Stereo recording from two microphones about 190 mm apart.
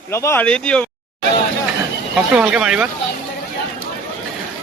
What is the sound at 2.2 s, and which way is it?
Speech, 5° right (ahead or behind).